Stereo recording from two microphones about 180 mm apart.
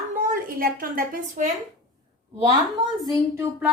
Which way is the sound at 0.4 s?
50° right (ahead or behind).